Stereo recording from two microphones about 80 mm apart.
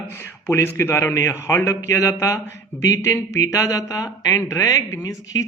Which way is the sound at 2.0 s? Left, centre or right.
Left.